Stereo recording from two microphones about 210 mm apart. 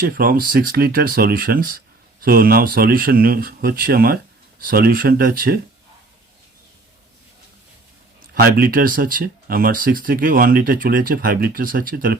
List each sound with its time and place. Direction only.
0.0 s speech: 45° right (ahead or behind)
8.4 s speech: 45° right (ahead or behind)